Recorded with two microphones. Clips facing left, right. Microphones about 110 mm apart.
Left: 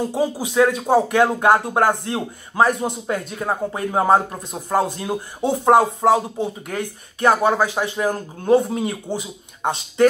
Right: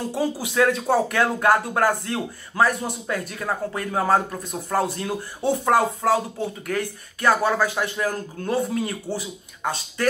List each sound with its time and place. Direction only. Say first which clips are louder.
0.1 s speech: left 3 dB; 15° left (ahead or behind)